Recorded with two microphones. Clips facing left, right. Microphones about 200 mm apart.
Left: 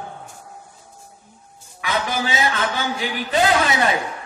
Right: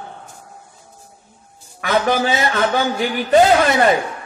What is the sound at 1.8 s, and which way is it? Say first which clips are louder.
A man's voice: right 7 dB; 50° right (ahead or behind).